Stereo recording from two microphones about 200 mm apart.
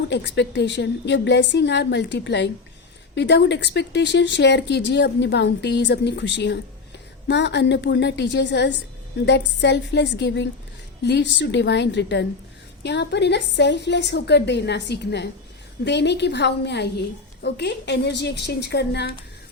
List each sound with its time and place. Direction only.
0.1 s a woman's voice: 60° left (ahead or behind)